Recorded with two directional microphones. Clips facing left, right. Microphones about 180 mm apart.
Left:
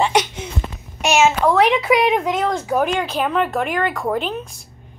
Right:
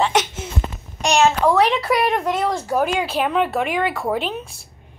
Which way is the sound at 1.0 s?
5° left (ahead or behind).